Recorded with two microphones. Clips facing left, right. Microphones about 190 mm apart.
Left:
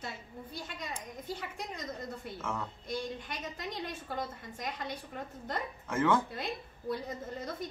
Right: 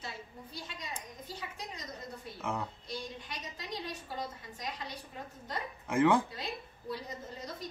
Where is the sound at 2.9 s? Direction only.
55° left (ahead or behind).